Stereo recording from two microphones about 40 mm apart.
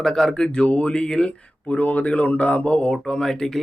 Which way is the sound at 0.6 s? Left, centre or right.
Left.